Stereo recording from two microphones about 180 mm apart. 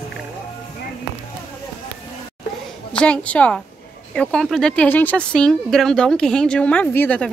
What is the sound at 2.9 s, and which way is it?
A woman's voice, 5° left (ahead or behind).